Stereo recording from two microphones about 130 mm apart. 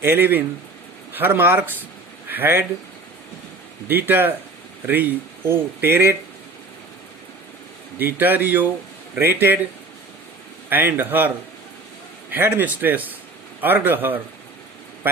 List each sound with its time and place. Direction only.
0.0 s speech: 15° right (ahead or behind)
3.8 s speech: 15° right (ahead or behind)
7.9 s speech: 15° right (ahead or behind)
10.7 s speech: 15° right (ahead or behind)
12.3 s speech: 15° right (ahead or behind)